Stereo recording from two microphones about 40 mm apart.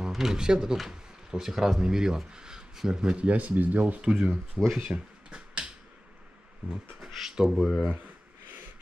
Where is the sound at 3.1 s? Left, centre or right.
Right.